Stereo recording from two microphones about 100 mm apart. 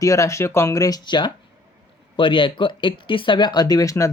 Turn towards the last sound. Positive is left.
turn(degrees=30)  # may be behind; listen again after turning